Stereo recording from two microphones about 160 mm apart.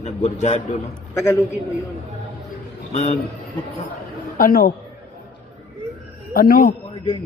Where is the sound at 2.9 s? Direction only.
45° left (ahead or behind).